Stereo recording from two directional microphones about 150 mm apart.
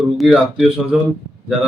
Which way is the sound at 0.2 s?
Centre (ahead or behind).